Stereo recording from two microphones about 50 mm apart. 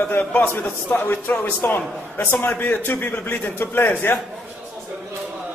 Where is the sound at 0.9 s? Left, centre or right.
Left.